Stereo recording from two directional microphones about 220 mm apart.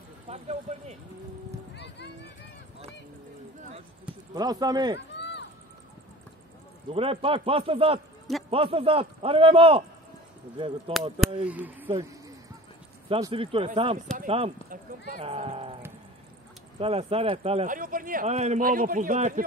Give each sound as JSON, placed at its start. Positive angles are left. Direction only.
{"t": 0.3, "sound": "speech", "side_deg": -30}
{"t": 4.3, "sound": "speech", "side_deg": -15}
{"t": 5.1, "sound": "a sound", "side_deg": 50}
{"t": 6.9, "sound": "a man's voice", "side_deg": -25}
{"t": 10.9, "sound": "a man's voice", "side_deg": -25}
{"t": 11.4, "sound": "speech", "side_deg": -5}
{"t": 13.1, "sound": "a man's voice", "side_deg": -25}
{"t": 14.7, "sound": "a man's voice", "side_deg": -40}
{"t": 16.8, "sound": "speech", "side_deg": -25}